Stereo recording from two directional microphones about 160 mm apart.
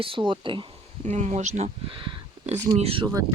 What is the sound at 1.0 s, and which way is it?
Speech, 45° right (ahead or behind).